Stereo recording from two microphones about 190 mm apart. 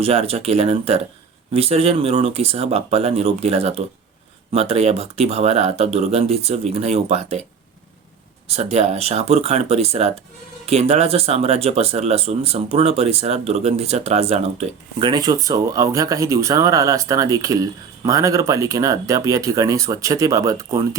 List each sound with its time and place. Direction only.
0.0 s speech: 30° right (ahead or behind)
8.4 s speech: 35° right (ahead or behind); by 20.7 s 15° right (ahead or behind)